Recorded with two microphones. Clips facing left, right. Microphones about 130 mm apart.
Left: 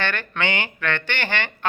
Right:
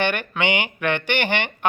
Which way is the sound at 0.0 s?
15° right (ahead or behind).